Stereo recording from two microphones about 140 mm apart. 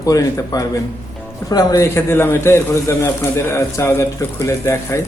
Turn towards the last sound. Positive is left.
turn(degrees=20)  # may be behind; listen again after turning